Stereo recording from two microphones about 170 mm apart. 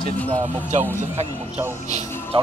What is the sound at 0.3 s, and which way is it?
Speech, 45° right (ahead or behind).